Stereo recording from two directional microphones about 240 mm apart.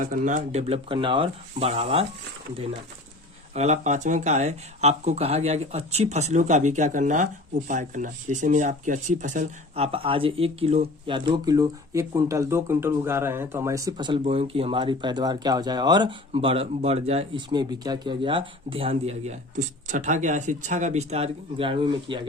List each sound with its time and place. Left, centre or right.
0.0 s speech: right
3.5 s speech: right